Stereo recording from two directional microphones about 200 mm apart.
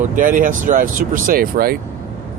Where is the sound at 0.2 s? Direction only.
40° right (ahead or behind).